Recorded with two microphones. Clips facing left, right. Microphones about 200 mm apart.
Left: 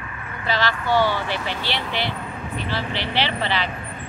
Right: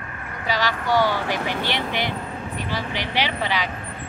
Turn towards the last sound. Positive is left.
turn(degrees=-10)  # may be behind; listen again after turning